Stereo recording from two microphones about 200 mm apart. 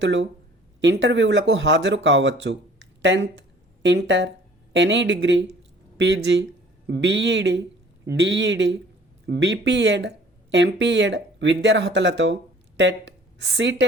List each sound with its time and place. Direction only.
0.0 s speech: 65° right (ahead or behind)